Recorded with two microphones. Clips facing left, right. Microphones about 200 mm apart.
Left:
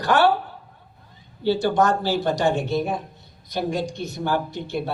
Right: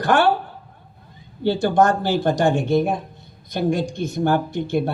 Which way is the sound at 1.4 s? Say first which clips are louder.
Right 2 dB; 50° right (ahead or behind).